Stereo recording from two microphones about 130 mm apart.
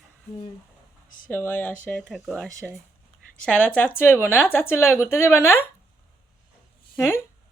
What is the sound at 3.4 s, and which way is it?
Speech, 10° left (ahead or behind).